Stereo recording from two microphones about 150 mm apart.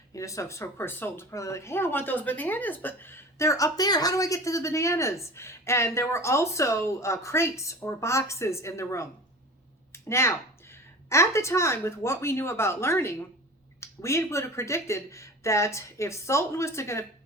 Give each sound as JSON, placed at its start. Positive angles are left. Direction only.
{"t": 0.1, "sound": "speech", "side_deg": 20}
{"t": 9.9, "sound": "a sound", "side_deg": 15}
{"t": 11.1, "sound": "speech", "side_deg": 20}